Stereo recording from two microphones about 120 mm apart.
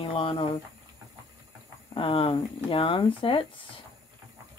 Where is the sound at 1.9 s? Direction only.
50° left (ahead or behind).